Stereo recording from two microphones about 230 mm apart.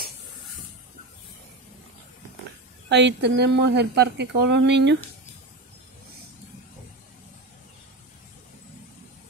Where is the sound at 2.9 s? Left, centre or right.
Right.